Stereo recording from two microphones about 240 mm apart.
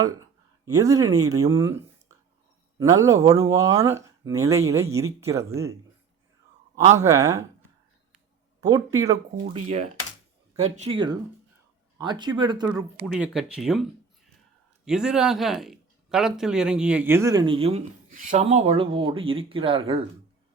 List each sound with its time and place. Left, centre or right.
0.6 s speech: centre
6.9 s speech: centre
8.6 s speech: centre
9.5 s speech: right
13.1 s speech: centre
14.8 s speech: centre; by 20.0 s right